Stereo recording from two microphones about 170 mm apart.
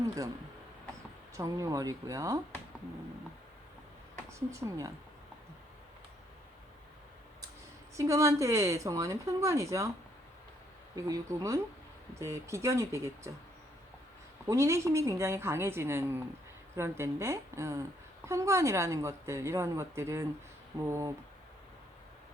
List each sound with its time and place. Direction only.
1.4 s speech: 20° right (ahead or behind)
4.4 s speech: 15° right (ahead or behind)
7.9 s speech: 15° right (ahead or behind)
10.9 s speech: 20° right (ahead or behind)
14.4 s speech: 15° right (ahead or behind)